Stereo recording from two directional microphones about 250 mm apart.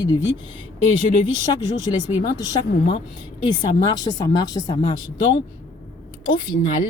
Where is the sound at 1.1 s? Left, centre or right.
Centre.